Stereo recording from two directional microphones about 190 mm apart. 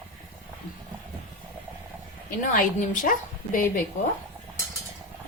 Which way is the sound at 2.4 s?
45° left (ahead or behind).